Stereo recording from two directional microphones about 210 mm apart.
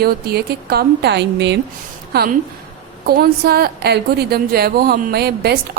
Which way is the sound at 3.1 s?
45° right (ahead or behind).